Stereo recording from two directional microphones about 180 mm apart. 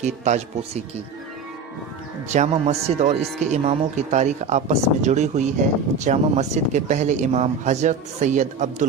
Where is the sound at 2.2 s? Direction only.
40° right (ahead or behind).